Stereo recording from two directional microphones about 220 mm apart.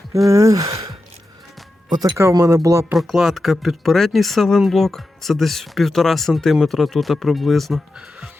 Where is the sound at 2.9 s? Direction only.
Centre (ahead or behind).